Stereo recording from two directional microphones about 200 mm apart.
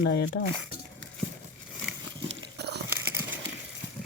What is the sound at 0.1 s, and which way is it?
Speech, 60° left (ahead or behind).